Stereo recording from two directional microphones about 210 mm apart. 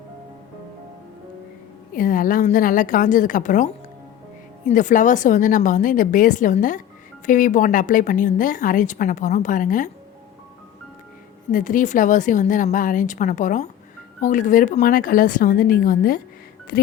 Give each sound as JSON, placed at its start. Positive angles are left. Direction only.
{"t": 1.9, "sound": "a woman's voice", "side_deg": 40}
{"t": 4.7, "sound": "a woman's voice", "side_deg": 35}
{"t": 11.5, "sound": "a woman's voice", "side_deg": 40}